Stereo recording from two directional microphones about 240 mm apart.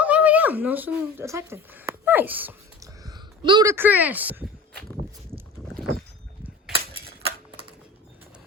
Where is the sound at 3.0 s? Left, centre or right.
Centre.